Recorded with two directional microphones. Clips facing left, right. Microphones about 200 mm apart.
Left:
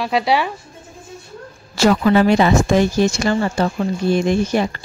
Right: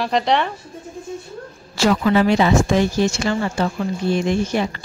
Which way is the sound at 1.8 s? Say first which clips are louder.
Left 2 dB; 45° left (ahead or behind).